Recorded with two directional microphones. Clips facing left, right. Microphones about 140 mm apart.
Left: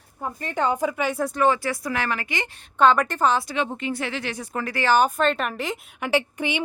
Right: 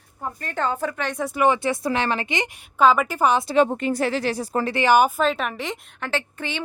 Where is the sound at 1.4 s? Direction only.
20° right (ahead or behind).